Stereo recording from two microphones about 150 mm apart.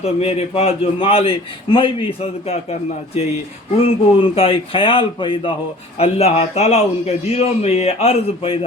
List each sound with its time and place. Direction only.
0.0 s a man's voice: 45° left (ahead or behind)
3.8 s a man's voice: 40° left (ahead or behind)